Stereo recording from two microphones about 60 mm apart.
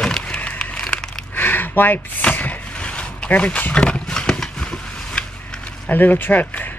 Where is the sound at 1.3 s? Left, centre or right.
Left; by 5.6 s centre.